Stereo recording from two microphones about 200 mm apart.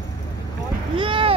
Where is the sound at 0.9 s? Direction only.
25° right (ahead or behind).